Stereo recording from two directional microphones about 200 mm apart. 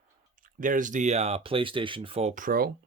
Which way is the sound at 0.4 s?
40° right (ahead or behind).